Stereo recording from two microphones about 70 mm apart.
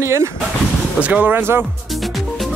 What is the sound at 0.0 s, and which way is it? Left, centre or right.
Speech, right.